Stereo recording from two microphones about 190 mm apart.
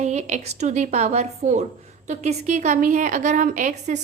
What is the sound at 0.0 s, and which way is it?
A woman's voice, 40° right (ahead or behind).